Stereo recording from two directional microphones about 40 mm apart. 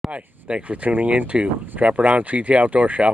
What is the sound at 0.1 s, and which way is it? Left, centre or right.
Speech, right.